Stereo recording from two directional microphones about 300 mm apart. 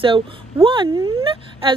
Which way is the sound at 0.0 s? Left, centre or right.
Centre.